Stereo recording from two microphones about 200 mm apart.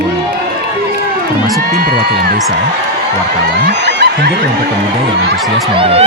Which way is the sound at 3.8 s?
60° right (ahead or behind).